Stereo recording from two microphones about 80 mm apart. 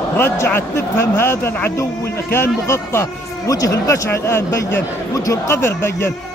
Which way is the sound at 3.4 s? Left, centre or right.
Left.